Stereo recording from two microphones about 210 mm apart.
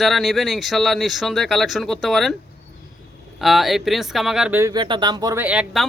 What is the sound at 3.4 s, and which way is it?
Speech, centre (ahead or behind).